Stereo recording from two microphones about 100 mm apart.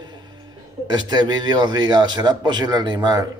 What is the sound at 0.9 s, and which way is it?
A man's voice, 45° right (ahead or behind).